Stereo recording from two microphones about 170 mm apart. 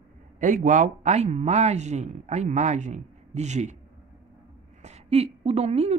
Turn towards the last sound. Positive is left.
turn(degrees=-40)  # may be behind; listen again after turning